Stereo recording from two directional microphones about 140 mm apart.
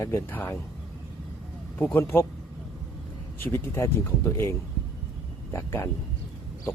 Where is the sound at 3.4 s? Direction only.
15° left (ahead or behind).